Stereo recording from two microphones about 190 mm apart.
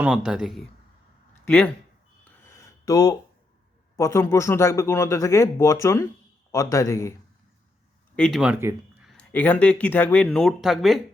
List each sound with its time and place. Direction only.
0.0 s speech: 5° right (ahead or behind)
2.2 s a sound: 15° left (ahead or behind)
3.9 s speech: 15° left (ahead or behind)
8.1 s speech: 5° left (ahead or behind)
9.0 s speech: 5° left (ahead or behind)